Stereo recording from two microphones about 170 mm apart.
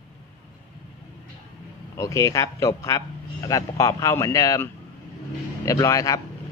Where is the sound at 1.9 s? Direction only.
20° left (ahead or behind).